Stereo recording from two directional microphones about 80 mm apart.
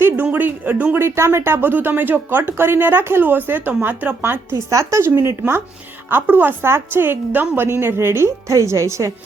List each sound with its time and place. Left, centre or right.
0.0 s speech: right
1.0 s speech: right
4.2 s a woman's voice: right